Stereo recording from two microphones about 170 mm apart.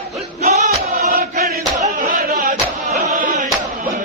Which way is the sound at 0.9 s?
60° right (ahead or behind).